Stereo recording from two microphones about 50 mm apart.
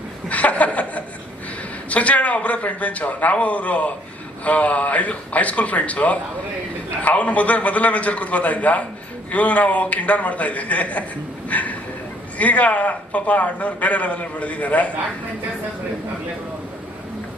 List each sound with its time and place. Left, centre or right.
0.3 s chuckle: left
1.9 s a man's voice: left
11.4 s a sound: left
12.4 s a man's voice: left